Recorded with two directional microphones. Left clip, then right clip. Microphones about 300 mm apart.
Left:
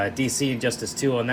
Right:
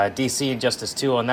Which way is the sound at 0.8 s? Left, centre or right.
Right.